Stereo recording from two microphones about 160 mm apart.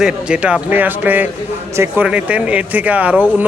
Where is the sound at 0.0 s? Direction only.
5° right (ahead or behind).